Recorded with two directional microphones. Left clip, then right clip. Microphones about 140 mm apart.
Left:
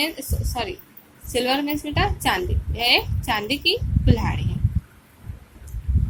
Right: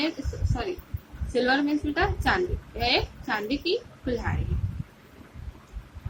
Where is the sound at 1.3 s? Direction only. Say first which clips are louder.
Left 2 dB; 25° left (ahead or behind).